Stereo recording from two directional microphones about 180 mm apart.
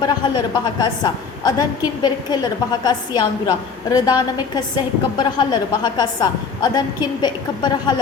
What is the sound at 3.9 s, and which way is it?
A woman's voice, 20° left (ahead or behind).